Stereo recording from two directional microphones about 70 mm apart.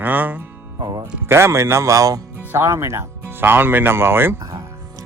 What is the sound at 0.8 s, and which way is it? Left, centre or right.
Speech, right.